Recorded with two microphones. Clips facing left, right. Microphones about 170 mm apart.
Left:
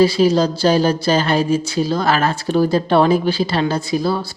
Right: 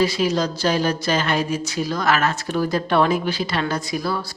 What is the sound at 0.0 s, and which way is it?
Speech, 30° left (ahead or behind).